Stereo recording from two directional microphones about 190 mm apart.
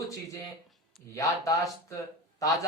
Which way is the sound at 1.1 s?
15° left (ahead or behind).